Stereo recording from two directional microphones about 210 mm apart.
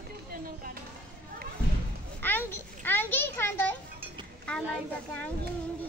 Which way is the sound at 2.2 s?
10° left (ahead or behind).